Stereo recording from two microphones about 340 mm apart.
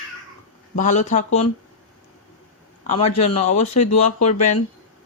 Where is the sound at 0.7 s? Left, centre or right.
Left.